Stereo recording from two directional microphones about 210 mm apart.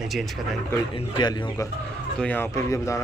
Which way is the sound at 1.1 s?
20° left (ahead or behind).